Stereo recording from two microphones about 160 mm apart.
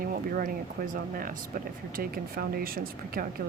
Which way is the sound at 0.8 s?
60° right (ahead or behind).